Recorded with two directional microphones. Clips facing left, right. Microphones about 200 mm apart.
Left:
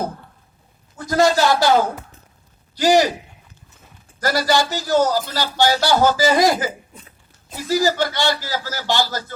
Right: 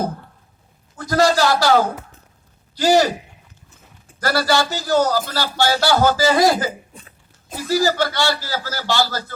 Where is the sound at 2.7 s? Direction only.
15° left (ahead or behind).